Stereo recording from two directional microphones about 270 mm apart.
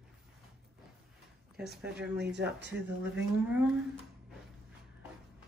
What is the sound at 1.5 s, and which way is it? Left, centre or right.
Speech, centre.